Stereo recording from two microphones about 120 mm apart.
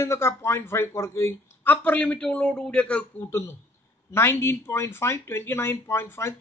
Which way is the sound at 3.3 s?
20° left (ahead or behind).